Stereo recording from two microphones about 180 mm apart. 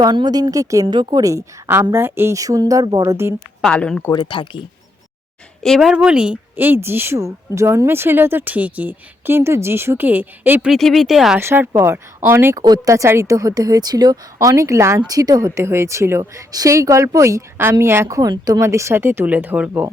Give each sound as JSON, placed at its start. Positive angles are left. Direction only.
{"t": 0.0, "sound": "a woman's voice", "side_deg": -25}
{"t": 3.6, "sound": "speech", "side_deg": 5}
{"t": 4.1, "sound": "speech", "side_deg": 25}
{"t": 5.6, "sound": "speech", "side_deg": 0}
{"t": 11.3, "sound": "speech", "side_deg": -10}